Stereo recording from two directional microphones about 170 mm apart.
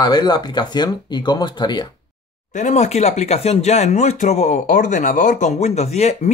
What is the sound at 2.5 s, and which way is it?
Speech, 45° left (ahead or behind).